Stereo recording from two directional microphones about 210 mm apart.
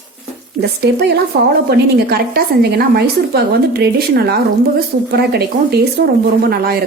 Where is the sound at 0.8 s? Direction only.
50° right (ahead or behind).